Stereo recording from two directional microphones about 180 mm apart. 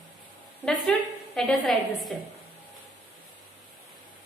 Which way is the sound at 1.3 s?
Centre (ahead or behind).